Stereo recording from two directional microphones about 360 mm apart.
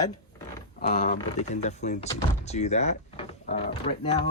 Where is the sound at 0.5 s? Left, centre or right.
Centre.